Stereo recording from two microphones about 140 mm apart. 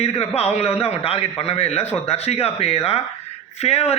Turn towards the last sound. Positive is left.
turn(degrees=45)  # may be behind; listen again after turning